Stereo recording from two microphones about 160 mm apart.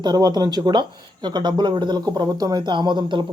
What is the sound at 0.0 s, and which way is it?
Speech, 25° right (ahead or behind).